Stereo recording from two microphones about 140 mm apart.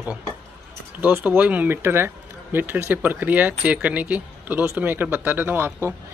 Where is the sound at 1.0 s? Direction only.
15° right (ahead or behind).